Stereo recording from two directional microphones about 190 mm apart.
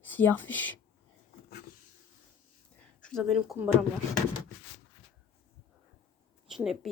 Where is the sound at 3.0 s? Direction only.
5° left (ahead or behind).